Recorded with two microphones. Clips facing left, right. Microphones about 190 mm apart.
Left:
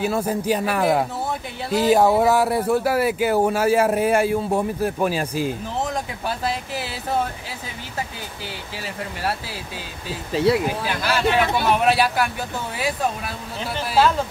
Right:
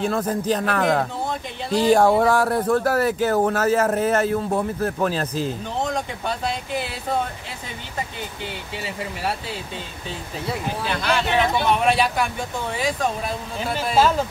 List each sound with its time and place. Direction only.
0.0 s speech: 10° left (ahead or behind)
8.7 s speech: centre (ahead or behind)
10.3 s speech: 80° left
10.8 s speech: 5° left (ahead or behind)